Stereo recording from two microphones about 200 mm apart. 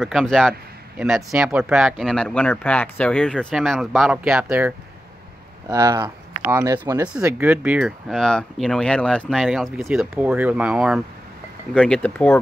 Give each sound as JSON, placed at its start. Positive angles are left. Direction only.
{"t": 0.0, "sound": "speech", "side_deg": 0}
{"t": 5.7, "sound": "speech", "side_deg": -20}
{"t": 7.1, "sound": "speech", "side_deg": -5}